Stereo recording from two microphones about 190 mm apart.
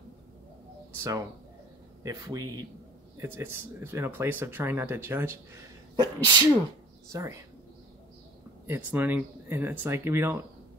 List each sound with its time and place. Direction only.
0.9 s speech: 15° right (ahead or behind)
5.9 s speech: 25° right (ahead or behind)
8.6 s speech: 10° right (ahead or behind)